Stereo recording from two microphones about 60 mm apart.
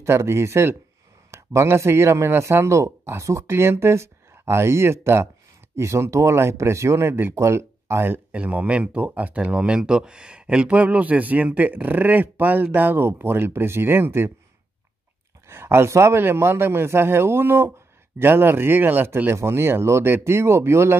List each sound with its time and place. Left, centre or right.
0.0 s speech: right
8.3 s a man's voice: right
15.4 s a man's voice: right